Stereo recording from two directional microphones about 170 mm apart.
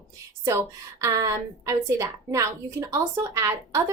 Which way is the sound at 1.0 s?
20° right (ahead or behind).